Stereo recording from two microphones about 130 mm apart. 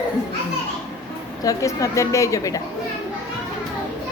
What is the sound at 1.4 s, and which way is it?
A woman's voice, 25° left (ahead or behind).